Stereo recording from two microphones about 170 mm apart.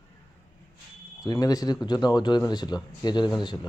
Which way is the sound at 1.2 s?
20° left (ahead or behind).